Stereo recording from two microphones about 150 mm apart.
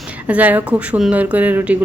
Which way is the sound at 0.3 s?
10° right (ahead or behind).